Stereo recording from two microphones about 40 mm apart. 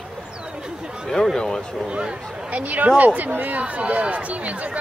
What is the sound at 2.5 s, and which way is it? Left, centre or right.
Speech, right.